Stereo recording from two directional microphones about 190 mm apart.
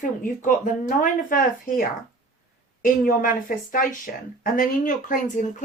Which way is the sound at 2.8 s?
45° left (ahead or behind).